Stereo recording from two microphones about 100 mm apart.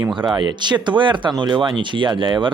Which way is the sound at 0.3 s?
50° right (ahead or behind).